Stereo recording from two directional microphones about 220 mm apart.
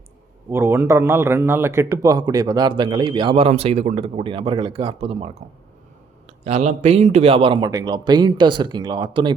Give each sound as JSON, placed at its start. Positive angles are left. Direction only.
{"t": 0.5, "sound": "a man's voice", "side_deg": -10}